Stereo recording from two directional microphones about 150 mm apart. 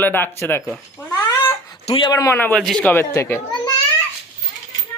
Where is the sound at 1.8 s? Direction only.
35° left (ahead or behind).